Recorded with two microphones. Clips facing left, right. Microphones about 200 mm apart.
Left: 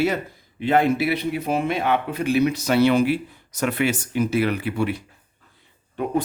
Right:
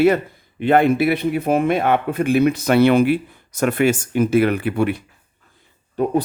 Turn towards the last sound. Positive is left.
turn(degrees=-40)  # may be behind; listen again after turning